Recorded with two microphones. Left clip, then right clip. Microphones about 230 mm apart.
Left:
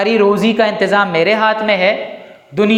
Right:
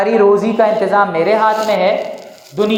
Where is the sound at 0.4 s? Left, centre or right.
Left.